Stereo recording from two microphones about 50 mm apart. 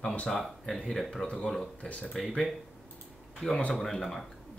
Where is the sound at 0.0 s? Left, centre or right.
Left.